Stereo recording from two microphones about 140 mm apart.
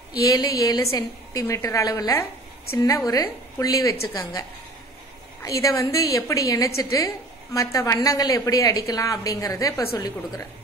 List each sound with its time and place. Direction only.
0.2 s a woman's voice: 25° left (ahead or behind)